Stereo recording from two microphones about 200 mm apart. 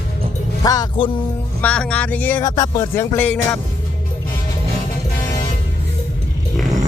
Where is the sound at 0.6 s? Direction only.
20° left (ahead or behind).